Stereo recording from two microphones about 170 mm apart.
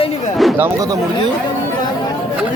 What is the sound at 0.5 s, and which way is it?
Speech, 20° right (ahead or behind).